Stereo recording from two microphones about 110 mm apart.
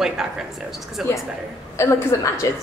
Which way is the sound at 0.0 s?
5° right (ahead or behind).